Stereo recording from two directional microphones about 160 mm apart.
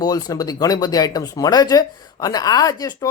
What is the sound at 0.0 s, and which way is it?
Speech, 25° left (ahead or behind).